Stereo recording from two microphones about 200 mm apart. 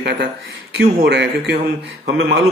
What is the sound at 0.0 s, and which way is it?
Speech, 55° right (ahead or behind).